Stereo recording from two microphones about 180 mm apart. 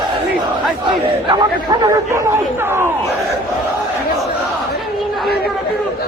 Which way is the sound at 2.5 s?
15° right (ahead or behind).